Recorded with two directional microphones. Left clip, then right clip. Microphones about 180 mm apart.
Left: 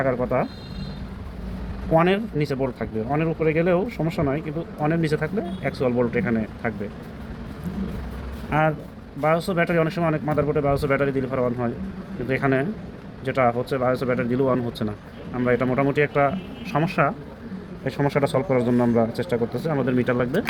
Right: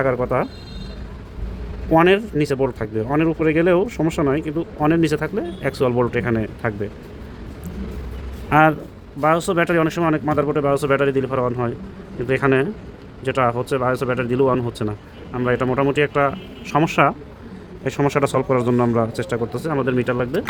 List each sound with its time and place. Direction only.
0.0 s speech: 40° right (ahead or behind)
1.9 s speech: 40° right (ahead or behind)
8.4 s speech: 50° right (ahead or behind)
9.5 s a man's voice: 40° right (ahead or behind); by 20.4 s 20° right (ahead or behind)